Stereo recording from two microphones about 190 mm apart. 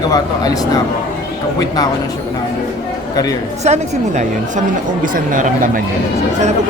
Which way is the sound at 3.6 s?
35° right (ahead or behind).